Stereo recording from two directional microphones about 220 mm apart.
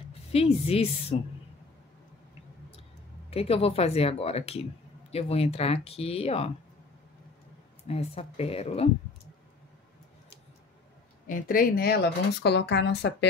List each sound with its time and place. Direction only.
0.3 s speech: 25° left (ahead or behind)
3.3 s speech: 25° left (ahead or behind)
7.9 s speech: 25° left (ahead or behind)
11.2 s speech: 40° left (ahead or behind)